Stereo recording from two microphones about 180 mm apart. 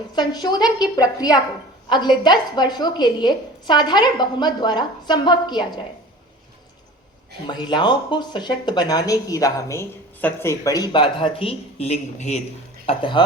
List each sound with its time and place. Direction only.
0.2 s speech: 25° left (ahead or behind)
7.4 s speech: 25° left (ahead or behind)